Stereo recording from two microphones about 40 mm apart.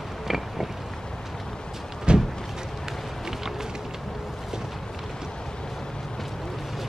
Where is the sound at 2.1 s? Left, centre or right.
Right.